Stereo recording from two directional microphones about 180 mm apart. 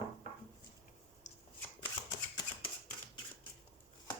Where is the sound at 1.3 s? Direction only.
40° left (ahead or behind).